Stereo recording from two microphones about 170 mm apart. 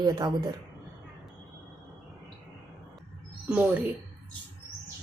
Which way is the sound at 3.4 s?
10° right (ahead or behind).